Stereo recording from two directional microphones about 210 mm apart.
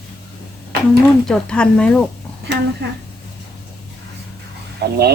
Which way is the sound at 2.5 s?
55° right (ahead or behind).